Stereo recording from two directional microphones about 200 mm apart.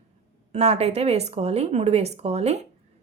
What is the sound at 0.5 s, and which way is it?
Speech, 30° right (ahead or behind).